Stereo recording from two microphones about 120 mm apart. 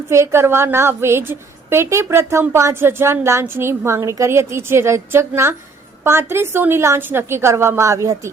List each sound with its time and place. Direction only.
0.1 s a woman's voice: 20° right (ahead or behind)